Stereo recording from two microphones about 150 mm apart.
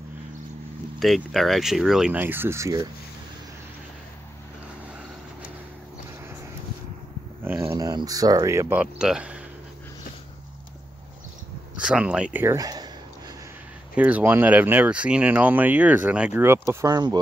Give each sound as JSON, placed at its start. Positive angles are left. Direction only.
{"t": 0.9, "sound": "speech", "side_deg": 0}
{"t": 7.4, "sound": "speech", "side_deg": -15}
{"t": 11.8, "sound": "speech", "side_deg": -5}
{"t": 12.5, "sound": "speech", "side_deg": -25}
{"t": 13.9, "sound": "speech", "side_deg": -10}